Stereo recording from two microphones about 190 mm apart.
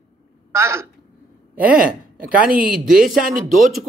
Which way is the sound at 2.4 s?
45° right (ahead or behind).